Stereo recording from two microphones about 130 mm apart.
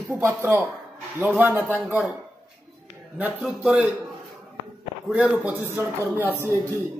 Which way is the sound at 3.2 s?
10° right (ahead or behind).